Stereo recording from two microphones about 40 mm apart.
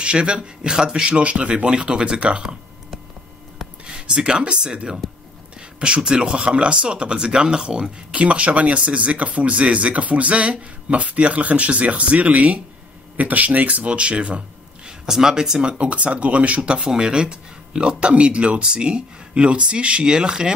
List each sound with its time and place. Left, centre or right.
0.0 s speech: right
3.8 s speech: right
5.8 s speech: right
14.9 s speech: centre
15.8 s speech: right
16.8 s speech: centre